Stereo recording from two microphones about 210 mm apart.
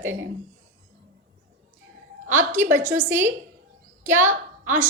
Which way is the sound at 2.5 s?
10° right (ahead or behind).